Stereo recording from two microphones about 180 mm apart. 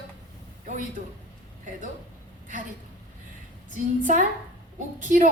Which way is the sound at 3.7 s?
45° right (ahead or behind).